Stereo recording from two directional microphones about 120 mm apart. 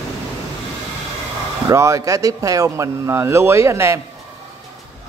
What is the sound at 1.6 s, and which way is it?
Speech, 25° right (ahead or behind).